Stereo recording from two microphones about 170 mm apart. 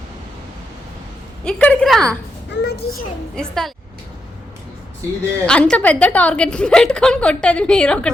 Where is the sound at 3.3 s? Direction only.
Centre (ahead or behind).